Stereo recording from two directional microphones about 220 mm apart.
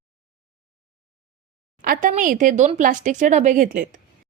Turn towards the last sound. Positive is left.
turn(degrees=-35)  # may be behind; listen again after turning